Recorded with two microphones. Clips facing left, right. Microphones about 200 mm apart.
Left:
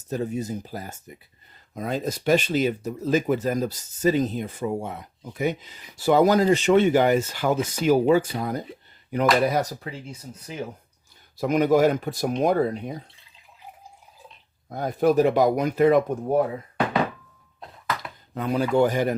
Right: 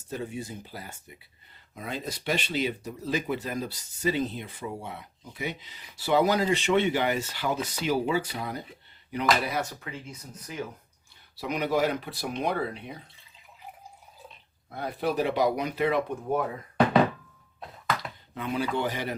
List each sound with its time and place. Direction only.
0.0 s speech: 40° left (ahead or behind)
11.3 s speech: 45° left (ahead or behind)
14.7 s speech: 45° left (ahead or behind)
18.3 s speech: 40° left (ahead or behind)